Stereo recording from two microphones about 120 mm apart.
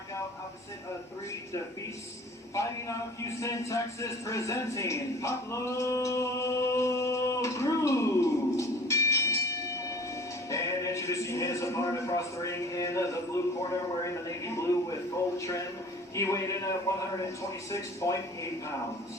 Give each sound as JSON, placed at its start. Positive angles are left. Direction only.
{"t": 2.6, "sound": "a man's voice", "side_deg": 25}